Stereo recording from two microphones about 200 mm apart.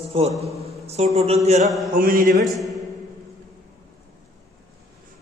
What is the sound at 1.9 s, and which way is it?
Speech, 45° right (ahead or behind).